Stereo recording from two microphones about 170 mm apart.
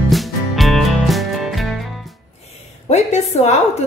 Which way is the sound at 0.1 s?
Centre (ahead or behind).